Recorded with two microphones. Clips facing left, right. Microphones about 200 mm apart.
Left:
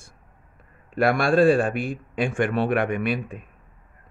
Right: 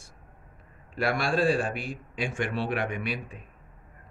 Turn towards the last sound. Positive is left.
turn(degrees=55)  # may be behind; listen again after turning